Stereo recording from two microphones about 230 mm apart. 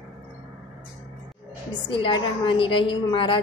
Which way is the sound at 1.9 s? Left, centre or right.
Left.